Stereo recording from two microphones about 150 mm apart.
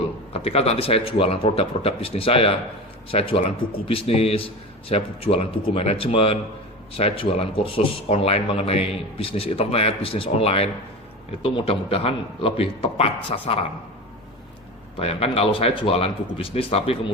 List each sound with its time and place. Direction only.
0.3 s a man's voice: 40° left (ahead or behind)
14.9 s a man's voice: 40° left (ahead or behind)